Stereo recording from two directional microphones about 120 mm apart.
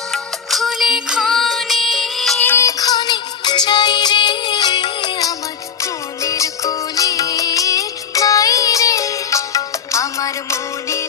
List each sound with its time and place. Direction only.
0.1 s music: centre (ahead or behind)
2.4 s music: 15° left (ahead or behind)
2.6 s music: 30° left (ahead or behind)
5.8 s music: 25° left (ahead or behind)